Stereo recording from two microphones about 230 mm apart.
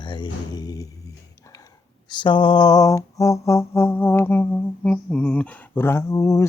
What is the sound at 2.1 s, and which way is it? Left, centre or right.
Music, left.